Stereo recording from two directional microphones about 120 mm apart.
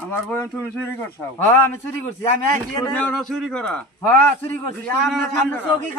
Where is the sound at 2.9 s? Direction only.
5° left (ahead or behind).